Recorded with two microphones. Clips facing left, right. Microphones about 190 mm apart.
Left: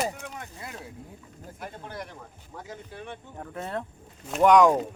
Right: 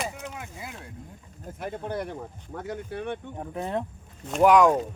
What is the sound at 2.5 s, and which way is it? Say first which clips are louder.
Speech: right 7 dB; 65° right (ahead or behind).